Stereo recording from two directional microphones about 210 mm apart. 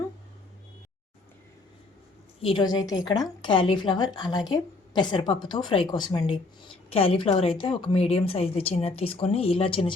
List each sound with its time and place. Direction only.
2.4 s speech: 25° left (ahead or behind)